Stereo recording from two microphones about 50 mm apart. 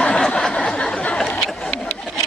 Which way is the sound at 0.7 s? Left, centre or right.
Centre.